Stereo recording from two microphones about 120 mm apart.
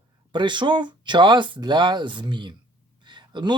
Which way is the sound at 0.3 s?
40° right (ahead or behind).